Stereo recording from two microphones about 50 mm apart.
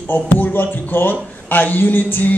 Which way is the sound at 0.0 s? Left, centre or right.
Left.